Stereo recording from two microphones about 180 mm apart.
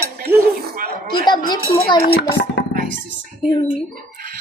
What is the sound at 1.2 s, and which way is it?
Speech, 25° left (ahead or behind).